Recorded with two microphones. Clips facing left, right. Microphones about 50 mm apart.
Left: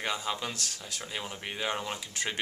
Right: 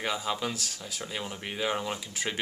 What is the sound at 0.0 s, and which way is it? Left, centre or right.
Speech, centre.